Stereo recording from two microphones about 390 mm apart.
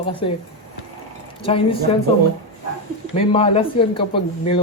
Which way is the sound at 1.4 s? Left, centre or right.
Centre.